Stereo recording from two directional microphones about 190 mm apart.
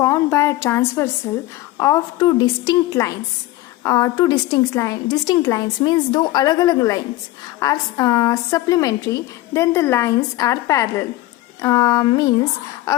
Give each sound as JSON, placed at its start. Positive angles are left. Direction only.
{"t": 0.0, "sound": "a woman's voice", "side_deg": 15}